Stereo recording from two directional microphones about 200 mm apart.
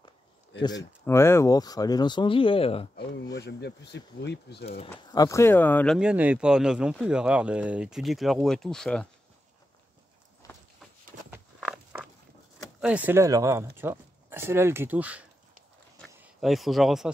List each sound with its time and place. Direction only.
0.6 s speech: 20° left (ahead or behind)
3.3 s speech: 55° left (ahead or behind)
5.1 s speech: 15° left (ahead or behind)
5.9 s speech: 5° right (ahead or behind)
10.4 s a sound: 15° left (ahead or behind)
11.2 s walk: 5° right (ahead or behind)
12.8 s speech: 5° right (ahead or behind)
16.3 s speech: centre (ahead or behind)